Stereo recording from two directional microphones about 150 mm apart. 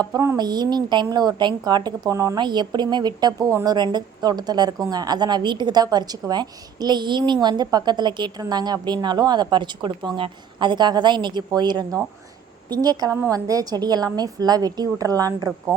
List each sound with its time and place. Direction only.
0.0 s a woman's voice: 20° right (ahead or behind)